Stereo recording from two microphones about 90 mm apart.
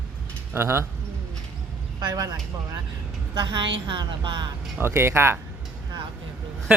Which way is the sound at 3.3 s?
65° right (ahead or behind).